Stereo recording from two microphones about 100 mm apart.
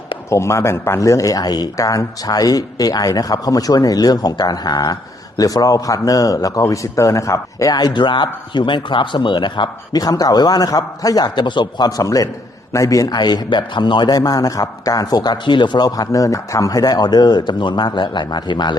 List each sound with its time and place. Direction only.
0.3 s speech: 30° left (ahead or behind); by 10.0 s 50° left (ahead or behind)
10.0 s a man's voice: 40° left (ahead or behind)